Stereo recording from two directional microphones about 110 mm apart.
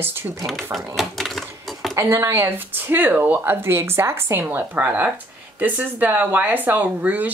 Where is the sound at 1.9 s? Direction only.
25° right (ahead or behind).